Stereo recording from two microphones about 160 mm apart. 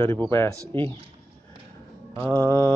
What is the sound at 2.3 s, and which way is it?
Speech, 10° left (ahead or behind).